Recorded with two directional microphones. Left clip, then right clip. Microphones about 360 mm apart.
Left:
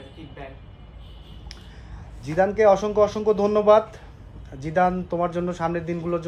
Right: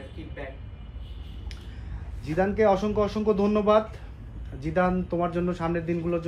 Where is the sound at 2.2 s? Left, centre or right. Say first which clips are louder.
Left 5 dB; centre.